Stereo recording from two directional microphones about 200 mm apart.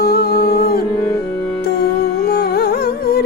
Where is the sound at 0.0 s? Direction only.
50° left (ahead or behind).